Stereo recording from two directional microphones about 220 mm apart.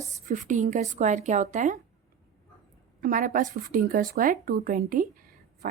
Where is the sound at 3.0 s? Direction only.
40° right (ahead or behind).